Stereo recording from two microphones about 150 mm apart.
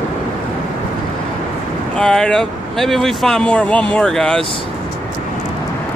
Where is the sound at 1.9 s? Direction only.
5° left (ahead or behind).